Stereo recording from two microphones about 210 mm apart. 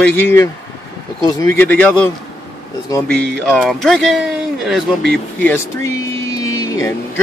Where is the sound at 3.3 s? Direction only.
Centre (ahead or behind).